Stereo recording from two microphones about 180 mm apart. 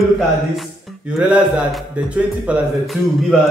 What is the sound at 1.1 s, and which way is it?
A man's voice, 5° right (ahead or behind).